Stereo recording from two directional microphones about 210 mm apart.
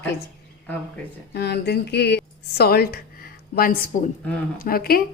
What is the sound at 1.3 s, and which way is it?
A woman's voice, 50° left (ahead or behind).